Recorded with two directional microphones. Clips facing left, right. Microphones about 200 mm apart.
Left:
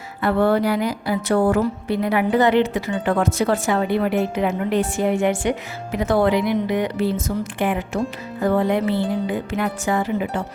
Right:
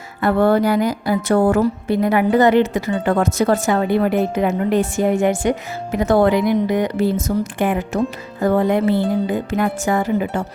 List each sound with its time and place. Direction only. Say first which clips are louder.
0.2 s speech: right 3 dB; 45° right (ahead or behind)